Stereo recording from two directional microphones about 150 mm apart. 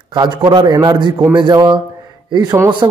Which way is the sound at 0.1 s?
30° right (ahead or behind).